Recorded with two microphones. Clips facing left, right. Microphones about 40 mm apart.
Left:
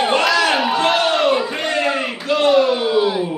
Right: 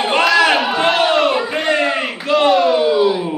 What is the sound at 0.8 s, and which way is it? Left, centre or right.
Battle cry, centre.